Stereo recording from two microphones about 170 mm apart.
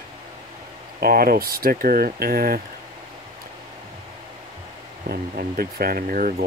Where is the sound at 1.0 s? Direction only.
60° right (ahead or behind).